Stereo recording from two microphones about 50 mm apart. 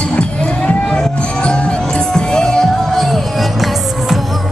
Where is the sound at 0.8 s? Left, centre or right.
Centre.